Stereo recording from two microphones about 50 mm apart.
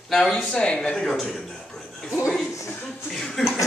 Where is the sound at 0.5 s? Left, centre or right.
Centre.